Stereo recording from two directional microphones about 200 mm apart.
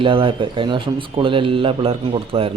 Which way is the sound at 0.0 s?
25° right (ahead or behind).